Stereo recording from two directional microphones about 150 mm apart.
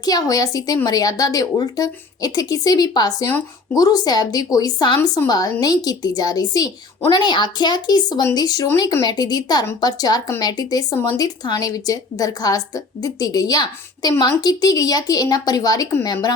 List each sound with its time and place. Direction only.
0.0 s a woman's voice: 25° left (ahead or behind)